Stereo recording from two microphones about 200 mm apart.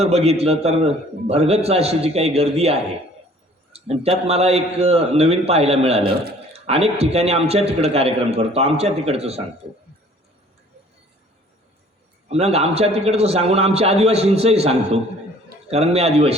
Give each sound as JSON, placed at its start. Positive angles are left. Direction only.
{"t": 0.0, "sound": "a man's voice", "side_deg": -30}
{"t": 6.5, "sound": "a sound", "side_deg": -30}
{"t": 6.9, "sound": "a man's voice", "side_deg": -30}
{"t": 12.3, "sound": "a man's voice", "side_deg": -30}